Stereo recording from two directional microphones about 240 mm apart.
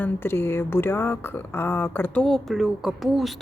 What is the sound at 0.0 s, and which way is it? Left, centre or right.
Speech, centre.